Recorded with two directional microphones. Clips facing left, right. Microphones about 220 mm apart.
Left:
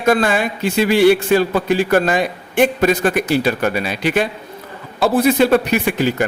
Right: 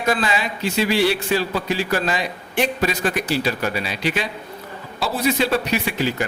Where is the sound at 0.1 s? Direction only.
50° left (ahead or behind).